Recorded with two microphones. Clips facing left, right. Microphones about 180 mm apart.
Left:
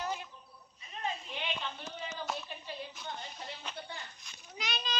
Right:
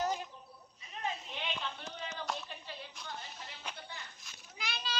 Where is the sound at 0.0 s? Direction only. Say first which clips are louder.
Right 3 dB; 40° right (ahead or behind).